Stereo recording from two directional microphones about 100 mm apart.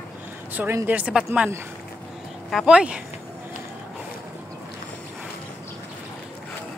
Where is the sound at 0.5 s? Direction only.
20° right (ahead or behind).